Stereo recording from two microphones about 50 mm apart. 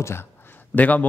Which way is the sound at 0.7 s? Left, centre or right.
Left.